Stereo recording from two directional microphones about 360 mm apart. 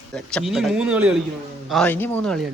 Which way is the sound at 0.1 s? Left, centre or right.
Centre.